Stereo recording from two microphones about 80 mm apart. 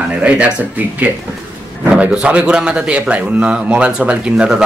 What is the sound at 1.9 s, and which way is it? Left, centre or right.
Speech, centre.